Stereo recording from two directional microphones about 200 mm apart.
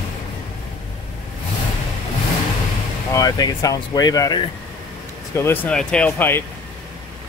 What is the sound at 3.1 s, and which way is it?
Speech, 20° left (ahead or behind).